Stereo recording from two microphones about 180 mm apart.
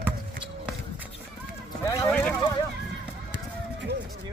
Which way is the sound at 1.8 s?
20° left (ahead or behind).